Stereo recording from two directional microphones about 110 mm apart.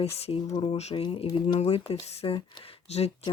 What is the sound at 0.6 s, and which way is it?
Speech, 65° left (ahead or behind).